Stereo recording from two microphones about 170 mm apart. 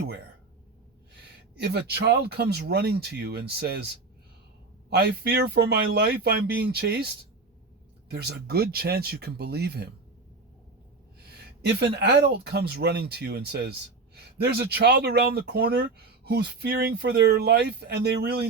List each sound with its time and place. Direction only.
1.5 s speech: 75° right (ahead or behind)
8.1 s speech: 70° right (ahead or behind)
11.8 s speech: 80° right